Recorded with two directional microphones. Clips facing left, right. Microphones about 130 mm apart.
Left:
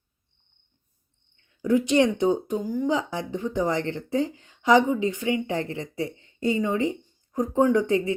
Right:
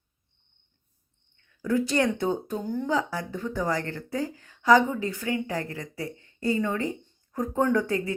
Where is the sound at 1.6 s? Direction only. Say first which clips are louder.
Left 4 dB; 20° left (ahead or behind).